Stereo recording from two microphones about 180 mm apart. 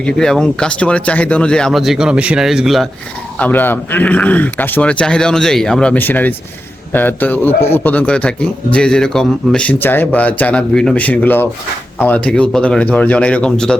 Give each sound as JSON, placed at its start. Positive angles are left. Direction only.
{"t": 0.0, "sound": "speech", "side_deg": 5}
{"t": 3.3, "sound": "a man's voice", "side_deg": 10}